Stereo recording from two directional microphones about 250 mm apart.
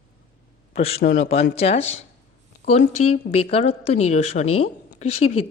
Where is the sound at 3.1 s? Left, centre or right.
Left.